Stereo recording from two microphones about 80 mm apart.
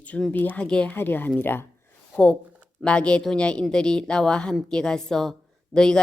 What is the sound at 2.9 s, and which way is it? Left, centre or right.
Speech, centre.